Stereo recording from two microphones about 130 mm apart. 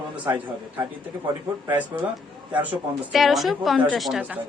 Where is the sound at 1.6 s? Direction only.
15° right (ahead or behind).